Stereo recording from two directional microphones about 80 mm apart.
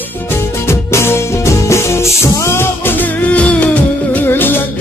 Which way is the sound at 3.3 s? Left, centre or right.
Centre.